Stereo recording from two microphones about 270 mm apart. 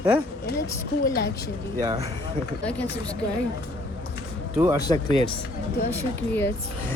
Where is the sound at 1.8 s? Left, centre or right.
Centre.